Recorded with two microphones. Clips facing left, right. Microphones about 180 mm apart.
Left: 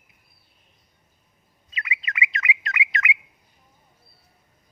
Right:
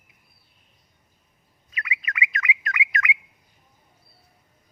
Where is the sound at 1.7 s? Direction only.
25° left (ahead or behind).